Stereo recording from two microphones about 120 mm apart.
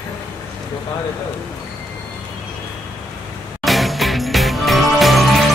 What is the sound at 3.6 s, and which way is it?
Music, centre (ahead or behind).